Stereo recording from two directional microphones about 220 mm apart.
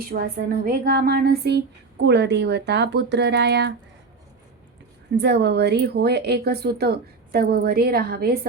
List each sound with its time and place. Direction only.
0.1 s speech: 40° right (ahead or behind)
5.1 s speech: 50° right (ahead or behind)